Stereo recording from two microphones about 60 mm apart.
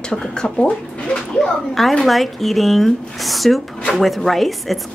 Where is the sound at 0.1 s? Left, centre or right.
Centre.